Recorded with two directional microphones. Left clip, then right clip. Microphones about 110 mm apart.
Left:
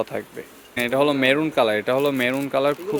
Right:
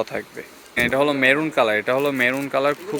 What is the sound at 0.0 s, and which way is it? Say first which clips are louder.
Speech: right 1 dB; 20° left (ahead or behind).